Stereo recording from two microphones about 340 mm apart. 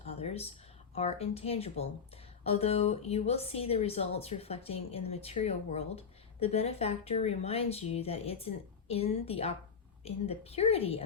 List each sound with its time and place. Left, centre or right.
0.2 s speech: centre